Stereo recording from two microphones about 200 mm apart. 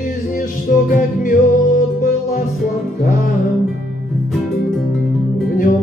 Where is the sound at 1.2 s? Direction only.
40° left (ahead or behind).